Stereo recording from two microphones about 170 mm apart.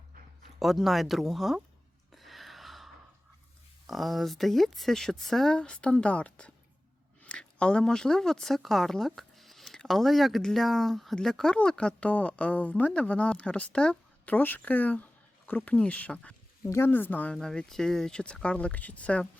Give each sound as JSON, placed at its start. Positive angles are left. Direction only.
{"t": 0.6, "sound": "a woman's voice", "side_deg": 0}
{"t": 2.1, "sound": "a sound", "side_deg": 0}
{"t": 3.8, "sound": "a woman's voice", "side_deg": 0}